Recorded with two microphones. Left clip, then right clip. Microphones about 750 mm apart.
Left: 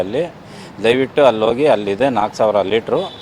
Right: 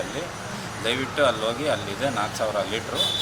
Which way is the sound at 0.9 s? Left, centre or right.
Left.